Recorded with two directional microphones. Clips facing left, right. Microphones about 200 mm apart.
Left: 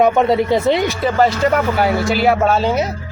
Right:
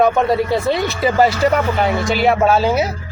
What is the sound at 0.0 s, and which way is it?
Speech, 20° left (ahead or behind).